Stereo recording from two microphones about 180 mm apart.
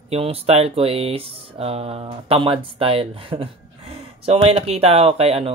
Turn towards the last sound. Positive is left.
turn(degrees=-35)  # may be behind; listen again after turning